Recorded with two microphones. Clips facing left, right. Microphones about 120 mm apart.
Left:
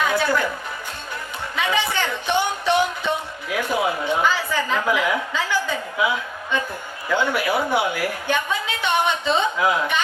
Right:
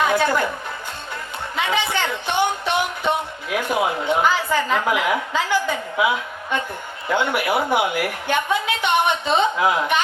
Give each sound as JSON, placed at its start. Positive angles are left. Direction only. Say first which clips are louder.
{"t": 0.0, "sound": "music", "louder": "right 2 dB", "side_deg": -20}
{"t": 1.5, "sound": "speech", "louder": "even", "side_deg": -20}